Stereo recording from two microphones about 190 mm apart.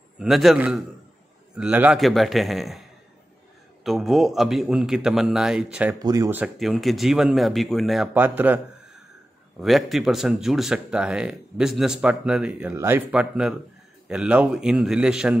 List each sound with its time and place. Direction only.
0.2 s speech: centre (ahead or behind)
3.8 s speech: centre (ahead or behind)
5.9 s speech: 20° right (ahead or behind)
6.4 s speech: centre (ahead or behind)
9.6 s speech: centre (ahead or behind)